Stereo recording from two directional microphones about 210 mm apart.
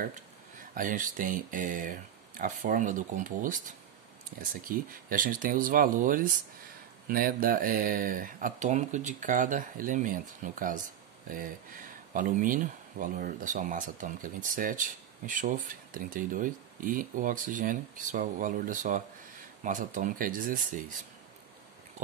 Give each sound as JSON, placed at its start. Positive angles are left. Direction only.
{"t": 0.7, "sound": "speech", "side_deg": -40}